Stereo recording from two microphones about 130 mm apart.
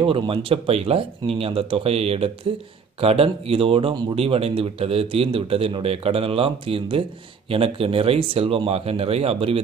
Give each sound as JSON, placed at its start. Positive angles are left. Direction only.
{"t": 0.0, "sound": "speech", "side_deg": -40}